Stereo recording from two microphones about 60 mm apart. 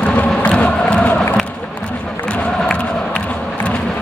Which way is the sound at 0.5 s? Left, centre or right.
Centre.